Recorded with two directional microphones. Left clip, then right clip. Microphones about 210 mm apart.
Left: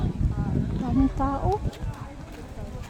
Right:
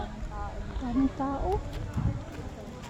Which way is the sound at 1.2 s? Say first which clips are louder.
Left 4 dB; 15° left (ahead or behind).